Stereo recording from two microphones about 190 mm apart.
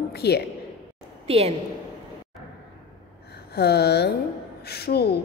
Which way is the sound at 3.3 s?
60° left (ahead or behind).